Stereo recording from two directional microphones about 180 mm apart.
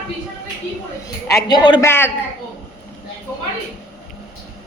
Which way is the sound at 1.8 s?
10° left (ahead or behind).